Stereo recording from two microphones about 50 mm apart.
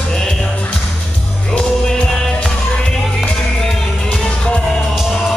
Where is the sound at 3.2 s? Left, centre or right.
Centre.